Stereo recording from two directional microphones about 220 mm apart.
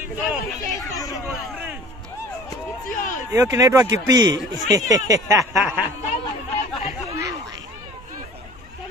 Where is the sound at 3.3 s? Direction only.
15° right (ahead or behind).